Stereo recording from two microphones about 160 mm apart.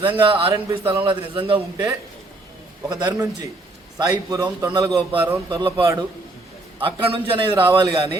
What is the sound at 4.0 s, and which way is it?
A man's voice, 25° right (ahead or behind).